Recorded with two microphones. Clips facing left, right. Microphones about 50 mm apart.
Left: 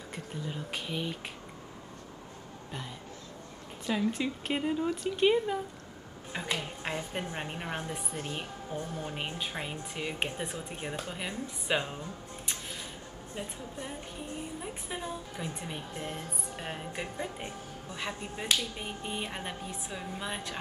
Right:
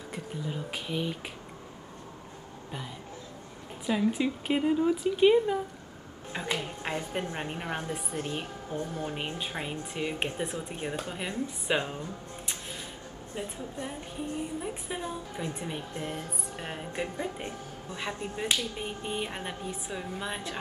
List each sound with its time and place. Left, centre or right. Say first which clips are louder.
0.1 s a woman's voice: right 3 dB; centre
3.8 s a woman's voice: right 3 dB; centre
8.7 s speech: right 3 dB; right
9.0 s a woman's voice: right 2 dB; centre
13.3 s a woman's voice: right 3 dB; centre